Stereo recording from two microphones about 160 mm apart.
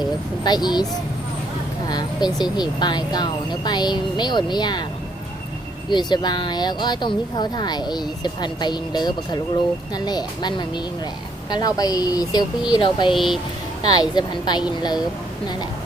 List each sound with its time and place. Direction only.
0.0 s speech: 25° left (ahead or behind)
1.9 s speech: 25° left (ahead or behind)
5.9 s speech: 25° left (ahead or behind)
13.1 s speech: centre (ahead or behind)
13.8 s speech: 25° left (ahead or behind)